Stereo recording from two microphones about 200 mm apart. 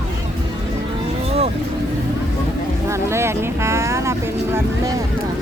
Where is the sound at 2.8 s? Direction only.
15° right (ahead or behind).